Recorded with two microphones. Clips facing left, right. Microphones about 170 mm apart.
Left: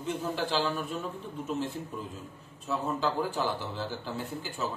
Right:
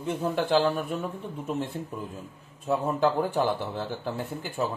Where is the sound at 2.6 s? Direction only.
55° right (ahead or behind).